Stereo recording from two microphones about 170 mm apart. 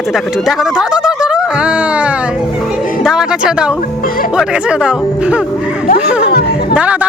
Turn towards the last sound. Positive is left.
turn(degrees=-10)  # may be behind; listen again after turning